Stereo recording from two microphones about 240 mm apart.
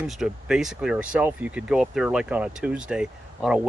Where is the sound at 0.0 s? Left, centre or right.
Centre.